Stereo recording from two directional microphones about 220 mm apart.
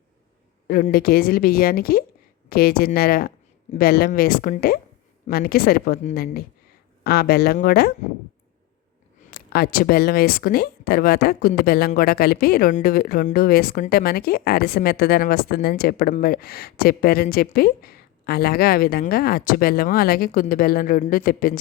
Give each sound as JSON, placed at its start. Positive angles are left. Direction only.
{"t": 0.7, "sound": "a woman's voice", "side_deg": 40}
{"t": 9.3, "sound": "speech", "side_deg": 45}